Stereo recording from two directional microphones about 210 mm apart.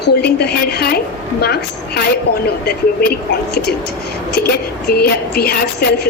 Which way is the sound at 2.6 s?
50° left (ahead or behind).